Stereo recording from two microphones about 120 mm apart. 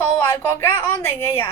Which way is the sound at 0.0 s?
20° left (ahead or behind).